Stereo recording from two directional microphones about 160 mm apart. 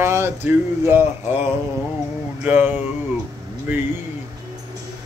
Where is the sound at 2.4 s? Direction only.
10° right (ahead or behind).